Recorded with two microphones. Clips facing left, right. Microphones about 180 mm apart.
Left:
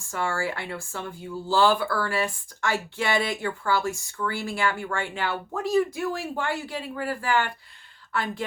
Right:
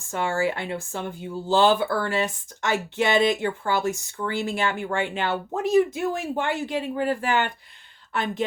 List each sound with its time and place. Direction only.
0.1 s speech: 20° right (ahead or behind)